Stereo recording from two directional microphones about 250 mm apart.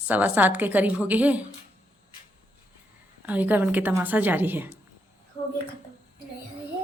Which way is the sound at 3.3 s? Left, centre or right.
Centre.